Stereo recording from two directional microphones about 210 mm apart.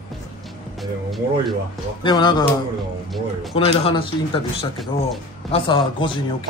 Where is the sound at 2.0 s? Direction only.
20° left (ahead or behind).